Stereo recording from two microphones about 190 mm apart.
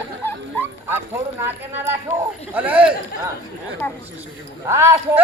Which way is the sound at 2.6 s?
10° right (ahead or behind).